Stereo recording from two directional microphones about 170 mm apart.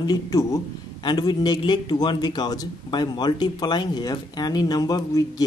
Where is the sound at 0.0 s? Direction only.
20° left (ahead or behind).